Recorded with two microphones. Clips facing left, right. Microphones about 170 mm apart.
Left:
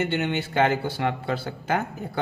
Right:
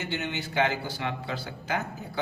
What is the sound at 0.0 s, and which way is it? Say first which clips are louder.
A man's voice: left 7 dB; 60° left (ahead or behind).